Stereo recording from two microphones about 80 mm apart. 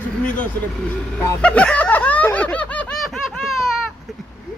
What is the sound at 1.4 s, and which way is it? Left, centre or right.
Snicker, centre.